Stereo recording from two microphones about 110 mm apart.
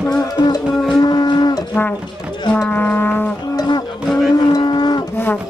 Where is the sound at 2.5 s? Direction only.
15° left (ahead or behind).